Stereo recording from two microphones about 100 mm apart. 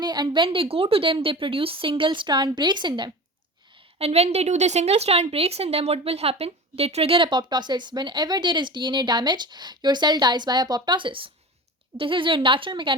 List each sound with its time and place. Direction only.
0.0 s a woman's voice: 45° right (ahead or behind)
0.4 s speech: 65° right (ahead or behind)
3.9 s a woman's voice: 85° right; by 12.9 s 55° right (ahead or behind)